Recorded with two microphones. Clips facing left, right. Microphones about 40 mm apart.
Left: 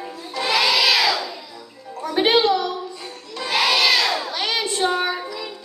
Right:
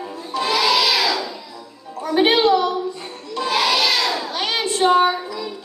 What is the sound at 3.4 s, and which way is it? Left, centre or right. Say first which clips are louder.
Child singing: even; left.